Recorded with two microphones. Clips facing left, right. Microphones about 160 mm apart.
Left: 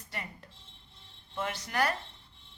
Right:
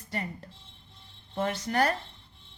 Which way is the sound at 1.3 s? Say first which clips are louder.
Right 6 dB; 35° right (ahead or behind).